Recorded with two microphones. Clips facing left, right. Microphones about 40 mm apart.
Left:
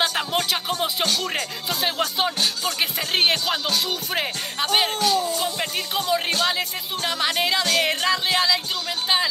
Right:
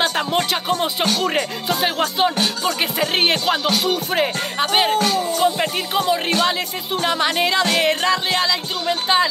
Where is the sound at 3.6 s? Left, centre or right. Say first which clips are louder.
Right 4 dB; right.